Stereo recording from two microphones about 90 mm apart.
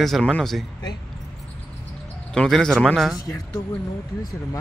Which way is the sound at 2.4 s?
5° left (ahead or behind).